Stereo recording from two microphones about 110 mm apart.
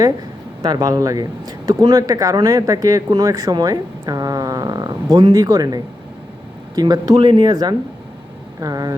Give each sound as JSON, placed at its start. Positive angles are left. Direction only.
{"t": 0.6, "sound": "speech", "side_deg": -35}
{"t": 7.2, "sound": "speech", "side_deg": -45}